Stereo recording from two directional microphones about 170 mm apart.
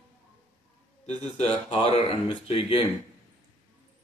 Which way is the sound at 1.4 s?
35° left (ahead or behind).